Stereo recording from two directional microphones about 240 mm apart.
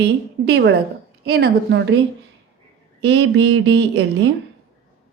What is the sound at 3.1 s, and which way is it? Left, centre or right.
Speech, right.